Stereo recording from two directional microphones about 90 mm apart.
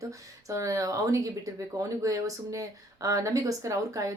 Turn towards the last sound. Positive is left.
turn(degrees=-40)  # may be behind; listen again after turning